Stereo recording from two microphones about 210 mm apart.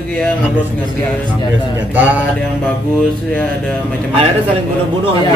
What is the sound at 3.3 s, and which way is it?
Speech, 5° left (ahead or behind).